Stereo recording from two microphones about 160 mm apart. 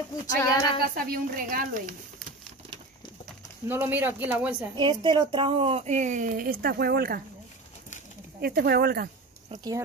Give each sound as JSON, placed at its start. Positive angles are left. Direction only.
{"t": 0.4, "sound": "a sound", "side_deg": 20}
{"t": 0.8, "sound": "speech", "side_deg": -65}
{"t": 3.6, "sound": "speech", "side_deg": -10}
{"t": 4.7, "sound": "a woman's voice", "side_deg": -30}
{"t": 8.4, "sound": "speech", "side_deg": -75}